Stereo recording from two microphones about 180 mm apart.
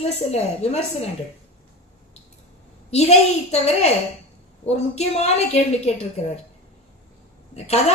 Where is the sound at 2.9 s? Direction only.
35° left (ahead or behind).